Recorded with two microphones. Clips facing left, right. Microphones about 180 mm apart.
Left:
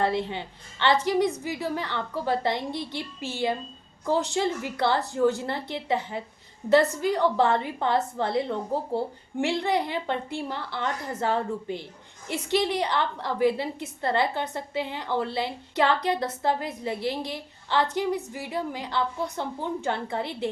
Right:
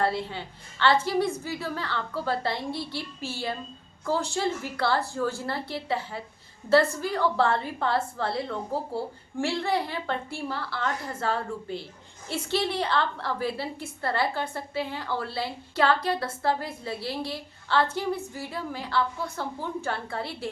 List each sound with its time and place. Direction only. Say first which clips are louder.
0.0 s a woman's voice: left 2 dB; 20° left (ahead or behind)